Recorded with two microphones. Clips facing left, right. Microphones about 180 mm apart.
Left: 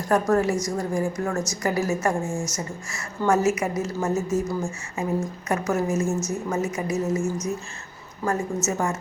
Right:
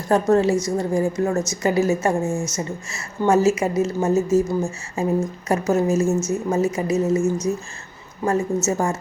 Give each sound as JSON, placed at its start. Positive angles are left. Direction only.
{"t": 0.1, "sound": "a woman's voice", "side_deg": -25}
{"t": 8.6, "sound": "a woman's voice", "side_deg": -30}